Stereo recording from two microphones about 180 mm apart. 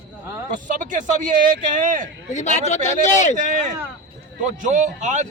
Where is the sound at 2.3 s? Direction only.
40° left (ahead or behind).